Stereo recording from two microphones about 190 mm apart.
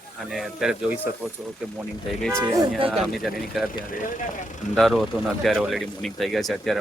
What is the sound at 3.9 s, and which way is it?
Speech, 45° left (ahead or behind).